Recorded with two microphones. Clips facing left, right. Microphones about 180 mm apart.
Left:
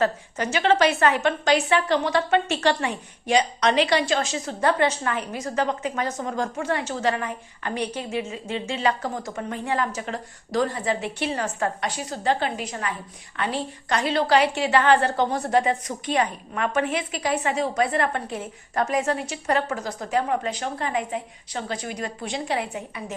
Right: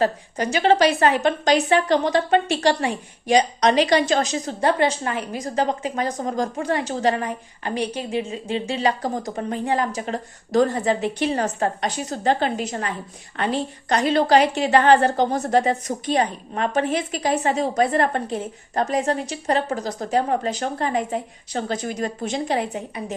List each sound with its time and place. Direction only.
0.0 s a woman's voice: 35° right (ahead or behind)
13.9 s a woman's voice: 45° right (ahead or behind)